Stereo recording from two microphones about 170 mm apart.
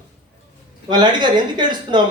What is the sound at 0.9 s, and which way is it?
Speech, 25° right (ahead or behind).